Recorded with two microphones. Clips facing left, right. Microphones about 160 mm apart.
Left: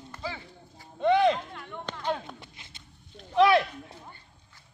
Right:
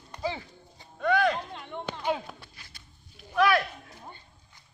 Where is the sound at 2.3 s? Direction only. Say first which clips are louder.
Left 2 dB; 20° left (ahead or behind).